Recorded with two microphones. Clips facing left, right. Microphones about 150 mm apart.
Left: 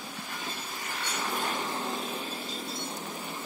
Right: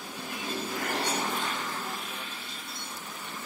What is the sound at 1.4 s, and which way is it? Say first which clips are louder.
Vehicle: left 2 dB; 15° left (ahead or behind).